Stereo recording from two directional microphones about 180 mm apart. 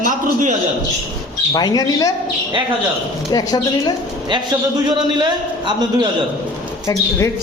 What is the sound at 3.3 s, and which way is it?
Speech, 20° left (ahead or behind).